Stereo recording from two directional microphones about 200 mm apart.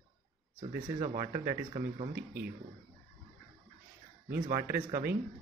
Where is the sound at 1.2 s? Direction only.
15° right (ahead or behind).